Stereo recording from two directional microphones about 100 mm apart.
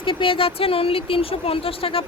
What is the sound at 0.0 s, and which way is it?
Speech, 60° left (ahead or behind).